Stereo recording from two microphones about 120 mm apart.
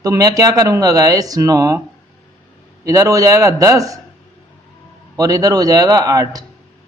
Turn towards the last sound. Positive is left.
turn(degrees=-30)  # may be behind; listen again after turning